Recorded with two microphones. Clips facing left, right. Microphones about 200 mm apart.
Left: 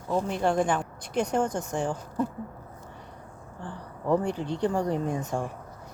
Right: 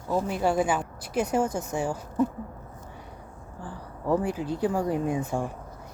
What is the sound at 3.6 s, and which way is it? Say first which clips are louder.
Speech: even; 5° right (ahead or behind).